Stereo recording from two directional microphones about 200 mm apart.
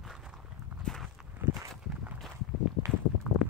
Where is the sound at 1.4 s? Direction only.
10° right (ahead or behind).